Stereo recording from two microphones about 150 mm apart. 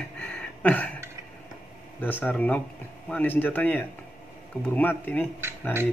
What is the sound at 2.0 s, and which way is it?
A man's voice, 10° left (ahead or behind).